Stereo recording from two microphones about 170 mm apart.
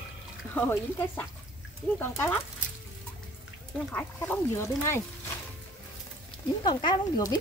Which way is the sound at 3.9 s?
10° left (ahead or behind).